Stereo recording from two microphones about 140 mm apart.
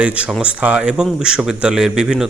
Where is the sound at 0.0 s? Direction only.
10° right (ahead or behind).